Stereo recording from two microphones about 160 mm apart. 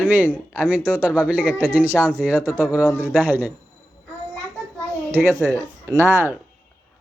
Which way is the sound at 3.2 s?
10° right (ahead or behind).